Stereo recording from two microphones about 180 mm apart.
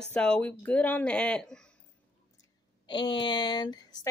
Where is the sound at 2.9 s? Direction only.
25° left (ahead or behind).